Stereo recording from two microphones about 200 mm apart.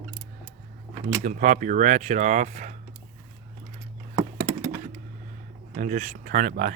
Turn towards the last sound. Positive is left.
turn(degrees=-40)  # may be behind; listen again after turning